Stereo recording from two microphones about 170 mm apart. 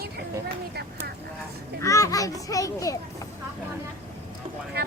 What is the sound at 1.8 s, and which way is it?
A child's voice, 20° left (ahead or behind).